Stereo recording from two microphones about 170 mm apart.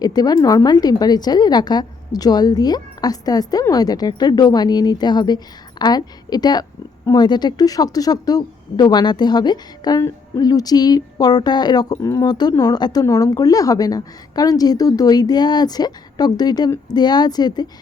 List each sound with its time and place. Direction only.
0.0 s a woman's voice: 25° left (ahead or behind)